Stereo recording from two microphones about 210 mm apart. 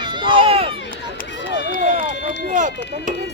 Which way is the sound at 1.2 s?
55° left (ahead or behind).